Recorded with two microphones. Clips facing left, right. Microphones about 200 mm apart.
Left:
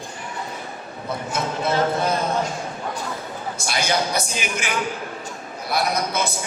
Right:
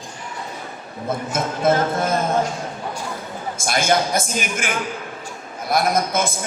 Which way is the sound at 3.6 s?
50° right (ahead or behind).